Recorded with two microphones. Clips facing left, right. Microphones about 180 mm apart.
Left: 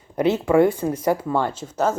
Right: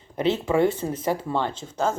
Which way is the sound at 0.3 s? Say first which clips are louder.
Left 4 dB; 55° left (ahead or behind).